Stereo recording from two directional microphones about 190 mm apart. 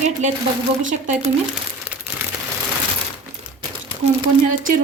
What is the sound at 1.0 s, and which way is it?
Speech, 40° right (ahead or behind).